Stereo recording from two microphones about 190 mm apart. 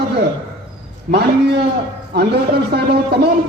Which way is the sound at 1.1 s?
60° right (ahead or behind).